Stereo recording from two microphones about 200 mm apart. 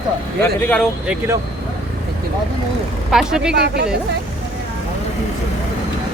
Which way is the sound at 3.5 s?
55° right (ahead or behind).